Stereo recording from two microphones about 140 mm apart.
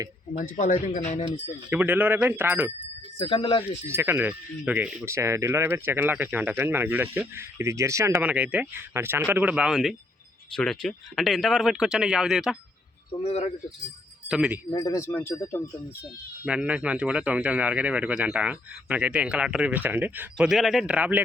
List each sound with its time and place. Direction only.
0.3 s speech: 65° left (ahead or behind)
1.7 s speech: 10° right (ahead or behind)
3.2 s speech: 40° left (ahead or behind)
3.8 s speech: 15° right (ahead or behind)
8.2 s speech: 10° right (ahead or behind)
13.2 s speech: 50° left (ahead or behind)
14.3 s speech: 5° right (ahead or behind)
14.7 s speech: 25° left (ahead or behind)
16.5 s speech: 10° right (ahead or behind)